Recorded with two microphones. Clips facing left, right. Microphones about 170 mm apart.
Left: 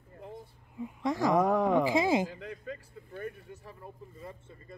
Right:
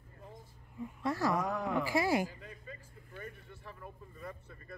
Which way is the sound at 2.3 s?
75° left (ahead or behind).